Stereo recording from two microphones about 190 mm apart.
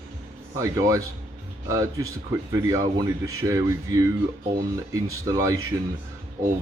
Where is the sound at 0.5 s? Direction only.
15° right (ahead or behind).